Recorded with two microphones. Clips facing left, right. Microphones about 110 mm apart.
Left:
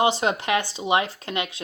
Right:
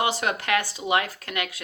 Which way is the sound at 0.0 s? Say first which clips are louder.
Left 4 dB; 25° left (ahead or behind).